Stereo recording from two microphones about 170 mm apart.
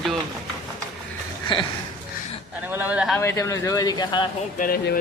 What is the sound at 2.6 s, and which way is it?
Speech, 10° right (ahead or behind).